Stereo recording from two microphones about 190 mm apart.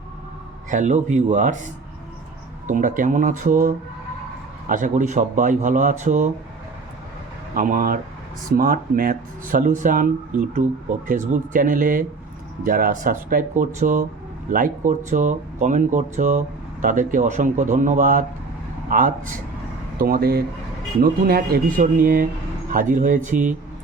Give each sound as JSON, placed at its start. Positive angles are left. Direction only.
{"t": 0.7, "sound": "speech", "side_deg": -40}
{"t": 2.6, "sound": "speech", "side_deg": -40}
{"t": 7.5, "sound": "speech", "side_deg": -45}